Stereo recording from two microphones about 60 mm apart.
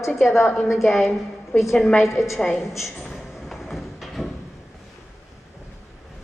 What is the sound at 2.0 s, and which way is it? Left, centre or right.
Speech, left.